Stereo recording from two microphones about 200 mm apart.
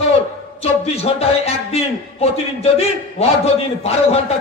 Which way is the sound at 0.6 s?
30° left (ahead or behind).